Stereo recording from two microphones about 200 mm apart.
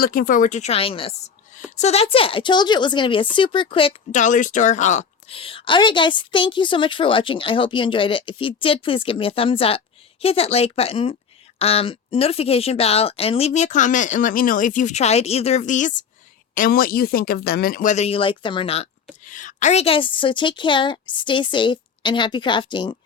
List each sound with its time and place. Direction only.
0.0 s speech: 45° left (ahead or behind); by 18.9 s 30° left (ahead or behind)
19.2 s speech: 40° left (ahead or behind); by 23.0 s 25° left (ahead or behind)